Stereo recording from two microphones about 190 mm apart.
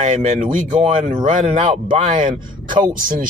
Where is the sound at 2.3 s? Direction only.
25° right (ahead or behind).